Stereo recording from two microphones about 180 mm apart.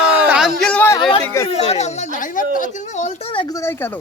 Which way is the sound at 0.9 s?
25° left (ahead or behind).